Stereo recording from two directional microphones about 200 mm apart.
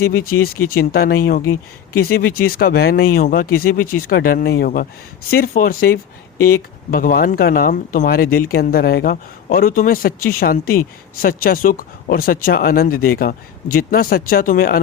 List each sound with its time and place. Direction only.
0.3 s speech: 50° left (ahead or behind)